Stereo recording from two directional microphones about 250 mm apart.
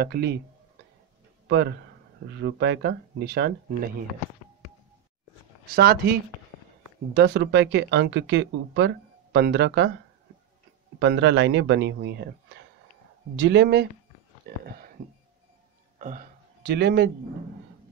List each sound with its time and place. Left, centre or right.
0.0 s speech: right
1.5 s speech: right
5.7 s speech: right
7.2 s speech: right
11.0 s speech: right
13.4 s speech: right
16.0 s speech: right